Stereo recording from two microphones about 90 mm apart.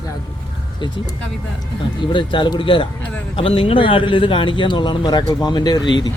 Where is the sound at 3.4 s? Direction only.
90° left.